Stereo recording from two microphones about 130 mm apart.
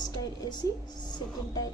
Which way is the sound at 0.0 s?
30° left (ahead or behind).